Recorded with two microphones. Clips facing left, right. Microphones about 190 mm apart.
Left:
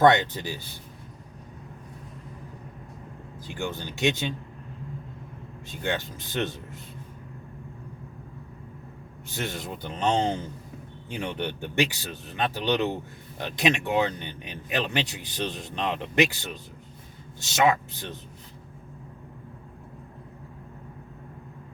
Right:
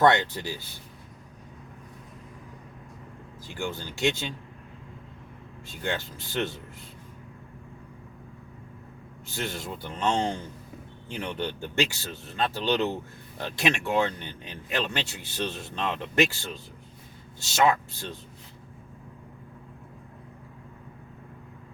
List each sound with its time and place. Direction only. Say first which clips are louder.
0.0 s a man's voice: left 2 dB; 20° left (ahead or behind)
3.4 s a man's voice: left 1 dB; 20° left (ahead or behind)
5.6 s a man's voice: left 2 dB; 20° left (ahead or behind)
9.3 s a man's voice: left 1 dB; 20° left (ahead or behind)